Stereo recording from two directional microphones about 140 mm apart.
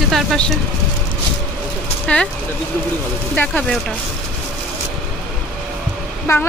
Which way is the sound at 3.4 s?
10° left (ahead or behind).